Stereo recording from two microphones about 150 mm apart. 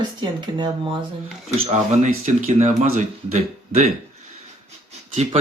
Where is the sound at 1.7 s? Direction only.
50° right (ahead or behind).